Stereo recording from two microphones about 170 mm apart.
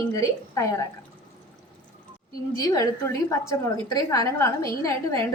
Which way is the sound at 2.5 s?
20° left (ahead or behind).